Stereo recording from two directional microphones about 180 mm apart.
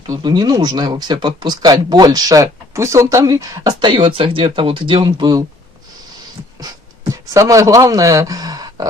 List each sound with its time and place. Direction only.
0.1 s speech: 25° right (ahead or behind)
6.6 s speech: 20° right (ahead or behind)